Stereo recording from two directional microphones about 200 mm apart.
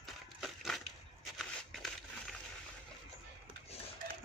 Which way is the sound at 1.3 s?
Centre (ahead or behind).